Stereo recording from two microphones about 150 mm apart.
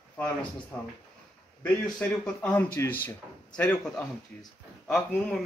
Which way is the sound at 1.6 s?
10° left (ahead or behind).